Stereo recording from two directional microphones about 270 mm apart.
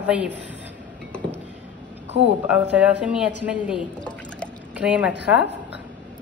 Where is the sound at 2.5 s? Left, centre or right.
Centre.